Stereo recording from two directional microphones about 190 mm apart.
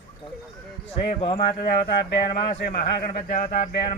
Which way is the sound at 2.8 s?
50° left (ahead or behind).